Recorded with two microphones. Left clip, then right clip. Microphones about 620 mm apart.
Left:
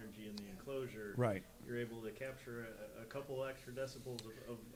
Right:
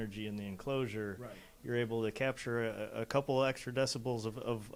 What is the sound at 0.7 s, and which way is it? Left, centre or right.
Speech, right.